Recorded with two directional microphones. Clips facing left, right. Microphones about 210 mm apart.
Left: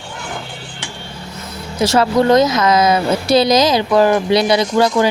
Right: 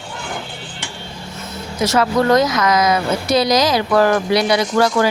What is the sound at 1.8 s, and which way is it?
Speech, 30° left (ahead or behind).